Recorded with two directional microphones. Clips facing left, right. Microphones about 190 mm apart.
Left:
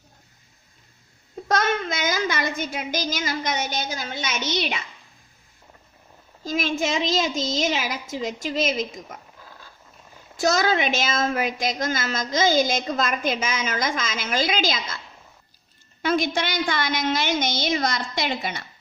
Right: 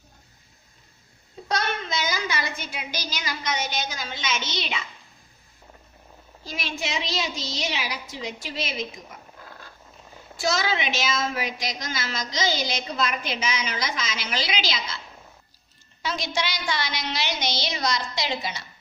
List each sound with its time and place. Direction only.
1.5 s child singing: 50° left (ahead or behind)
6.4 s a woman's voice: 45° left (ahead or behind)
10.3 s a woman's voice: 45° left (ahead or behind)
16.0 s a woman's voice: 55° left (ahead or behind)